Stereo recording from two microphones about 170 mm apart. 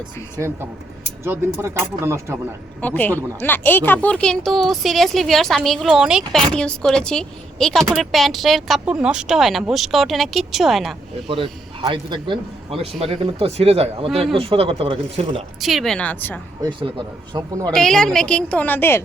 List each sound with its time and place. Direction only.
0.3 s speech: 15° right (ahead or behind)
2.8 s speech: 10° left (ahead or behind)
11.3 s a man's voice: 30° right (ahead or behind)
15.6 s speech: centre (ahead or behind)
17.3 s speech: 25° right (ahead or behind)
17.7 s speech: 5° left (ahead or behind)